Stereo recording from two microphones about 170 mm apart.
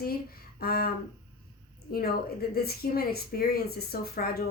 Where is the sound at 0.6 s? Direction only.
60° left (ahead or behind).